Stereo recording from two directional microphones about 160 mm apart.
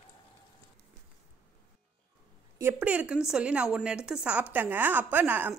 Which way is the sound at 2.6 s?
10° right (ahead or behind).